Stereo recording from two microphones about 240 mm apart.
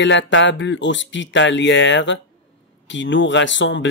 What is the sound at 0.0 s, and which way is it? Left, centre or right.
Speech, left.